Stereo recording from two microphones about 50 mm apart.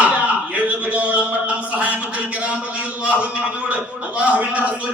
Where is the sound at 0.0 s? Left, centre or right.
Right.